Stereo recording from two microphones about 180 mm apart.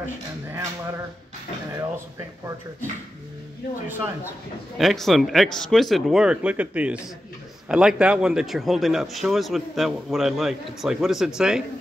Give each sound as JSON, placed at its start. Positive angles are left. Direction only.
{"t": 0.5, "sound": "speech", "side_deg": -10}
{"t": 4.7, "sound": "a man's voice", "side_deg": 0}